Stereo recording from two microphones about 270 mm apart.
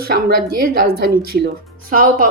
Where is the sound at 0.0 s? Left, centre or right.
Right.